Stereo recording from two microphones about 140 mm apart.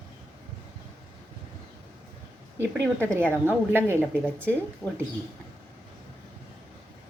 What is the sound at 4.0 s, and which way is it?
Speech, 10° left (ahead or behind).